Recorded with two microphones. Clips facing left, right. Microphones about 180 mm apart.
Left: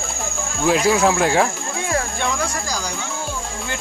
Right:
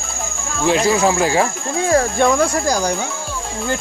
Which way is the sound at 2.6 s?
55° right (ahead or behind).